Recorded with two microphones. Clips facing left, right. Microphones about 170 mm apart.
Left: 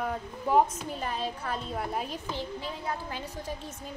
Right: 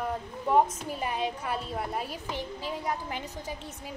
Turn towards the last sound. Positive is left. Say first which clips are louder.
# left 1 dB
turn(degrees=-15)  # may be behind; listen again after turning